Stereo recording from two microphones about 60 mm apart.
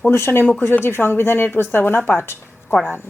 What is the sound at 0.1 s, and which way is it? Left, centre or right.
Speech, left.